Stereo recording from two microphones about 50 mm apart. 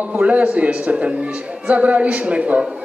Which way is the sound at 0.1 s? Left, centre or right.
Right.